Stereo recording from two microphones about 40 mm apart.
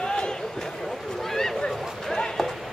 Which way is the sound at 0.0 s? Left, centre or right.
Centre.